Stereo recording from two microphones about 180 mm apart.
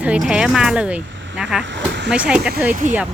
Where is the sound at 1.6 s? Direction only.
90° right.